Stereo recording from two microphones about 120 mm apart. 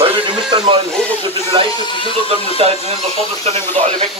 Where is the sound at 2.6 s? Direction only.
55° right (ahead or behind).